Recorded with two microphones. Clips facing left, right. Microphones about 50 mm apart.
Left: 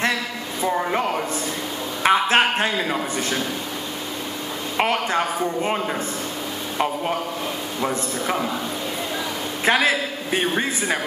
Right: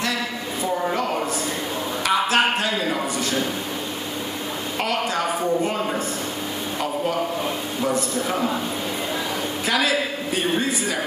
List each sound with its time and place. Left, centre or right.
2.0 s a man's voice: left
4.7 s speech: left
7.8 s a man's voice: left
9.7 s a woman's voice: left